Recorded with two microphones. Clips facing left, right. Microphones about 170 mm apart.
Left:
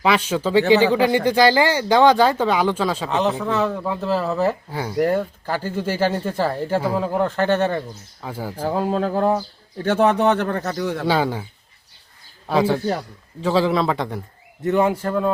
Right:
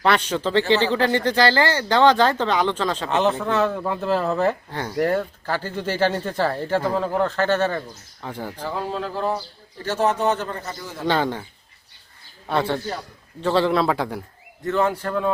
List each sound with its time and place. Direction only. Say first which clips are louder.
0.0 s speech: left 1 dB; 5° left (ahead or behind)
8.6 s speech: left 7 dB; 45° left (ahead or behind); by 11.0 s 70° left (ahead or behind)
11.0 s speech: right 1 dB; 10° left (ahead or behind)
12.5 s a man's voice: left 4 dB; 5° left (ahead or behind)
14.6 s speech: left 3 dB; 15° left (ahead or behind)